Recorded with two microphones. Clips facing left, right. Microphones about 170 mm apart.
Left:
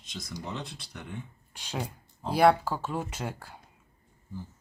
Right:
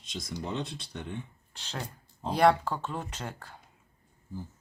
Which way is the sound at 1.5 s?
10° left (ahead or behind).